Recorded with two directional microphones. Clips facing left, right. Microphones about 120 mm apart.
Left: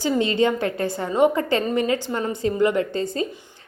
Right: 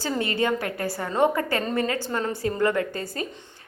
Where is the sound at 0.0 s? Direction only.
20° left (ahead or behind).